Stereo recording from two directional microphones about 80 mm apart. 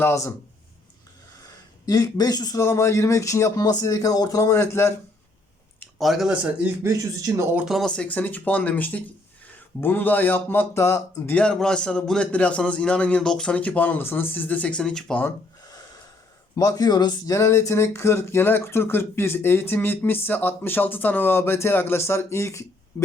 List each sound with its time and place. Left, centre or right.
0.0 s speech: left
1.9 s speech: left
2.6 s speech: left
3.6 s speech: left
6.0 s speech: centre
6.2 s speech: centre
6.8 s speech: right
7.6 s speech: centre
7.9 s speech: centre; by 11.3 s left
11.3 s a man's voice: centre
16.6 s speech: left
17.3 s speech: left